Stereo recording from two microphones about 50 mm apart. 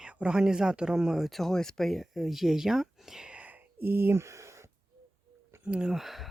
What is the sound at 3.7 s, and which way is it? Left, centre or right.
Speech, right.